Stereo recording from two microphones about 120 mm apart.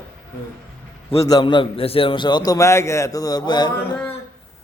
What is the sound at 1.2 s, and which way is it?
A man's voice, 35° left (ahead or behind).